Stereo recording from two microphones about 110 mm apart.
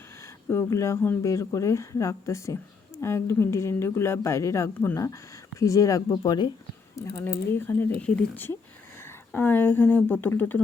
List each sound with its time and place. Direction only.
0.5 s speech: 25° left (ahead or behind)
6.9 s speech: 25° left (ahead or behind)